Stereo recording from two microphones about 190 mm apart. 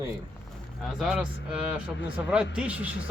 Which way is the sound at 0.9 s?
5° right (ahead or behind).